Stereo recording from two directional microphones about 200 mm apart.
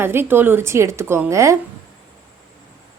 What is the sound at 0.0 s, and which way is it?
A woman's voice, 10° right (ahead or behind).